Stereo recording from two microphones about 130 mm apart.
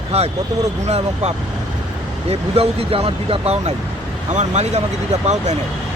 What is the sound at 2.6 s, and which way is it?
Speech, 50° right (ahead or behind).